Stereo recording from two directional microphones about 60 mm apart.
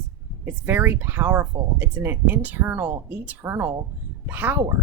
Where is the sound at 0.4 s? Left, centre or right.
Right.